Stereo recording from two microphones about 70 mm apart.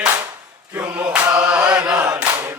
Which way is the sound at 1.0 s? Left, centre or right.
Centre.